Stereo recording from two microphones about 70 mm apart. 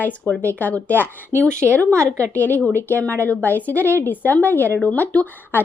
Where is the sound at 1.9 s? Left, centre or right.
Right.